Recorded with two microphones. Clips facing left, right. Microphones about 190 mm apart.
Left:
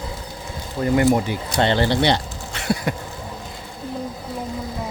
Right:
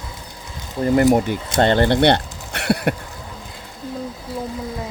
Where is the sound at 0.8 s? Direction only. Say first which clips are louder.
Right 2 dB; 40° right (ahead or behind).